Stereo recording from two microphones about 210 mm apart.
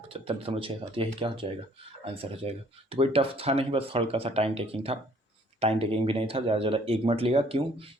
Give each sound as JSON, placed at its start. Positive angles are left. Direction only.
{"t": 0.1, "sound": "speech", "side_deg": -25}